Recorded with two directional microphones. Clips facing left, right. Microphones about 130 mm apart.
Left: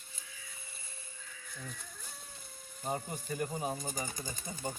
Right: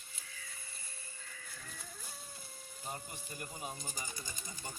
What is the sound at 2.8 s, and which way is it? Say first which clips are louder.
Speech: left 9 dB; 45° left (ahead or behind).